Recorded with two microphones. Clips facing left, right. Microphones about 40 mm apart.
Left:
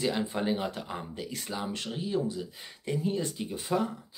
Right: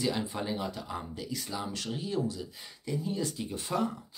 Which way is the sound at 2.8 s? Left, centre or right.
Left.